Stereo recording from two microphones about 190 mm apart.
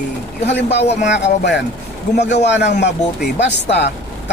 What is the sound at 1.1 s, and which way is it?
Speech, 65° left (ahead or behind).